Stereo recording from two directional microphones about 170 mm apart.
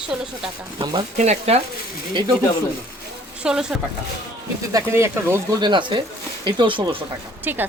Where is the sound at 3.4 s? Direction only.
5° right (ahead or behind).